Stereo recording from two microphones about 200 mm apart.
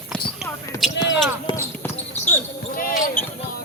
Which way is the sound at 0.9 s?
60° left (ahead or behind).